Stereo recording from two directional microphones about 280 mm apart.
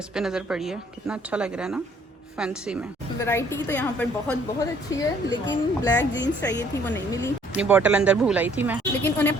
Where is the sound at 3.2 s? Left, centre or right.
Centre.